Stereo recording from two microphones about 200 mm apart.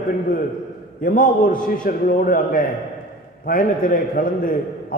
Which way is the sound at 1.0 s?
40° left (ahead or behind).